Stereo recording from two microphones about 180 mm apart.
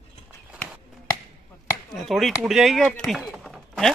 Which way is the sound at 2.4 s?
Centre (ahead or behind).